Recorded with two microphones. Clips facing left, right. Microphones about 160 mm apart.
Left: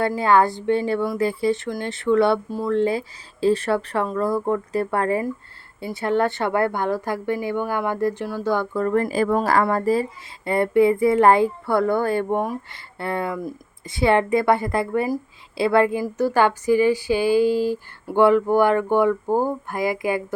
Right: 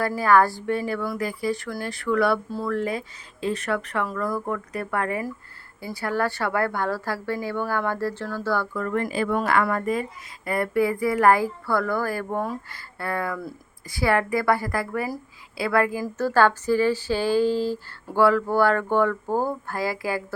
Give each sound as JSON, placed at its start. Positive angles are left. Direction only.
{"t": 0.1, "sound": "a woman's voice", "side_deg": 25}
{"t": 8.7, "sound": "a woman's voice", "side_deg": 35}